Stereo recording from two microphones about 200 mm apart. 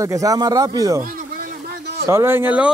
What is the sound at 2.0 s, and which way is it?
Speech, 15° right (ahead or behind).